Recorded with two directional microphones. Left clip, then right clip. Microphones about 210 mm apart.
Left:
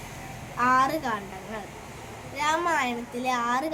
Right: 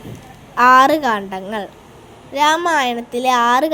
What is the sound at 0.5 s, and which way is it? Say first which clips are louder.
A woman's voice: right 12 dB; 40° right (ahead or behind).